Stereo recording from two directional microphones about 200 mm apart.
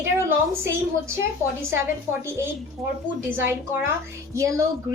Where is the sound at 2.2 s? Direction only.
15° right (ahead or behind).